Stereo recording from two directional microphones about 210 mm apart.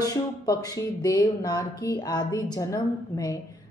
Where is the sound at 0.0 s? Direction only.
15° left (ahead or behind).